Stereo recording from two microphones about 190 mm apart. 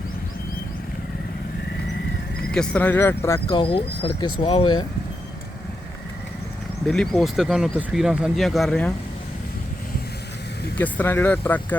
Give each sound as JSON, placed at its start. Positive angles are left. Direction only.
{"t": 2.5, "sound": "speech", "side_deg": 5}
{"t": 3.6, "sound": "speech", "side_deg": 30}
{"t": 6.8, "sound": "speech", "side_deg": 5}
{"t": 10.8, "sound": "speech", "side_deg": 10}